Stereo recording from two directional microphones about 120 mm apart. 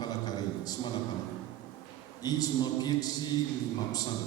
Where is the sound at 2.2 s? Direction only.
35° left (ahead or behind).